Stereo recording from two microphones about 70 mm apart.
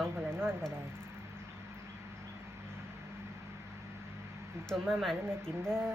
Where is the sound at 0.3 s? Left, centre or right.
Right.